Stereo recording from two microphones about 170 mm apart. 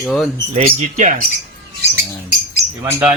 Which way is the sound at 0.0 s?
Centre (ahead or behind).